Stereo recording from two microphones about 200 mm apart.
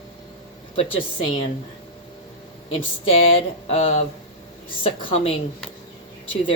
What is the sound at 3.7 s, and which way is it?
Speech, 30° left (ahead or behind).